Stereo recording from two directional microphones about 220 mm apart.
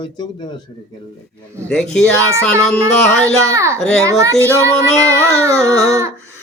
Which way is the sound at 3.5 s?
15° right (ahead or behind).